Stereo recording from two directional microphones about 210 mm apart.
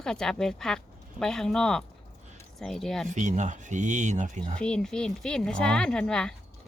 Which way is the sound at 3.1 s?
35° right (ahead or behind).